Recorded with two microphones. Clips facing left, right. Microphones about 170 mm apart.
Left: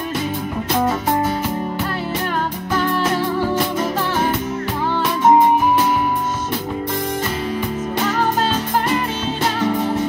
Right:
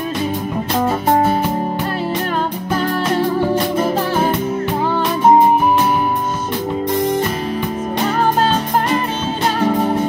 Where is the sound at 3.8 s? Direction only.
30° right (ahead or behind).